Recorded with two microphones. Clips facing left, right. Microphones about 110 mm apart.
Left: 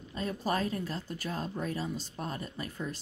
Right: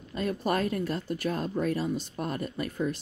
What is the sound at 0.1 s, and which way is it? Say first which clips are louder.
Speech: right 4 dB; 60° right (ahead or behind).